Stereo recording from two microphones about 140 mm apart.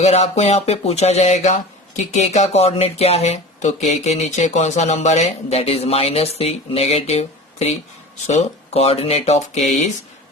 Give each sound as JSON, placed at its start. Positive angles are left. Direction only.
{"t": 0.0, "sound": "speech", "side_deg": 50}